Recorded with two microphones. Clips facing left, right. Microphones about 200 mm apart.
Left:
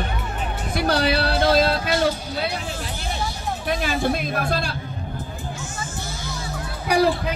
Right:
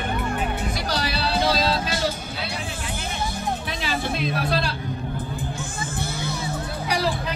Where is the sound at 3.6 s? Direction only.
50° left (ahead or behind).